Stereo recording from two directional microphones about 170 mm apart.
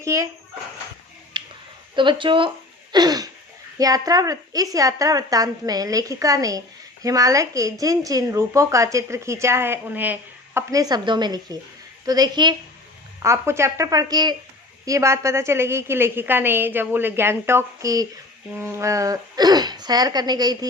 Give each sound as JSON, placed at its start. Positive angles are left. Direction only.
{"t": 0.0, "sound": "speech", "side_deg": -20}
{"t": 1.3, "sound": "a sound", "side_deg": -25}
{"t": 2.0, "sound": "a woman's voice", "side_deg": -30}
{"t": 2.9, "sound": "throat clearing", "side_deg": -25}
{"t": 3.8, "sound": "a woman's voice", "side_deg": -20}